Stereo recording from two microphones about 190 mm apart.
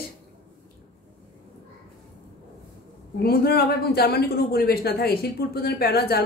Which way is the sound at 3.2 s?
55° left (ahead or behind).